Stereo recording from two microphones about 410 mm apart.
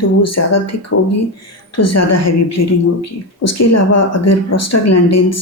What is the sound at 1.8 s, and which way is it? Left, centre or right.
Speech, left.